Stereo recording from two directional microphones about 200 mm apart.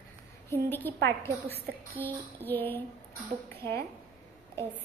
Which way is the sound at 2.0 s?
10° left (ahead or behind).